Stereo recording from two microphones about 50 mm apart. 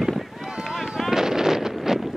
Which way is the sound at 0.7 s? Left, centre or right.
Centre.